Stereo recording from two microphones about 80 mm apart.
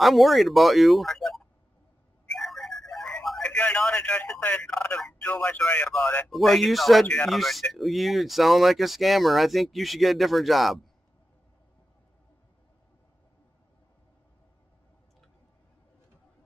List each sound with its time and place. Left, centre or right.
0.0 s speech: centre
2.3 s music: centre
3.5 s a sound: centre
4.4 s speech: centre
6.2 s speech: centre